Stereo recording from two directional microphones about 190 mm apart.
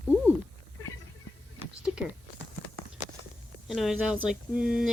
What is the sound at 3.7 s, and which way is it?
Speech, centre (ahead or behind).